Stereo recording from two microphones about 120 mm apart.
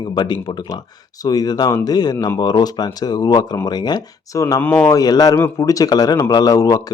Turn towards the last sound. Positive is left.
turn(degrees=30)  # may be behind; listen again after turning